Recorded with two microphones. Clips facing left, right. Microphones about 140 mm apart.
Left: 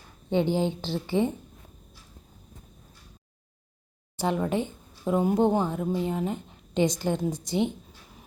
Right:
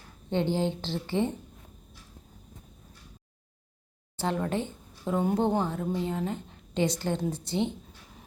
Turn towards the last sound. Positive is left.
turn(degrees=15)  # may be behind; listen again after turning